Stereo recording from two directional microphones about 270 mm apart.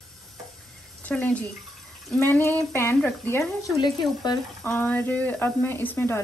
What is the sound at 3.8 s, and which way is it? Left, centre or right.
Speech, centre.